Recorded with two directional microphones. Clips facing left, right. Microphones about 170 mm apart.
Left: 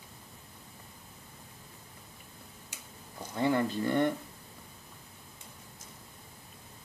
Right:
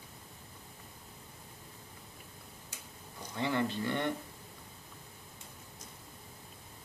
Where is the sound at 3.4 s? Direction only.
45° left (ahead or behind).